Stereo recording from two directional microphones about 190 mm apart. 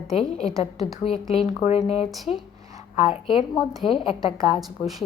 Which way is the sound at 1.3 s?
35° left (ahead or behind).